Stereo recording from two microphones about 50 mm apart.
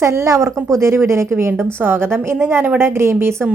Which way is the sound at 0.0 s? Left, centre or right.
Right.